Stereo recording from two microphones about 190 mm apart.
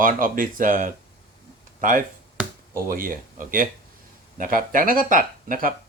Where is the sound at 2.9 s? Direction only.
45° right (ahead or behind).